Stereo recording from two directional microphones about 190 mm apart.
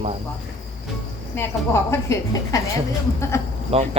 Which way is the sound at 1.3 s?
15° left (ahead or behind).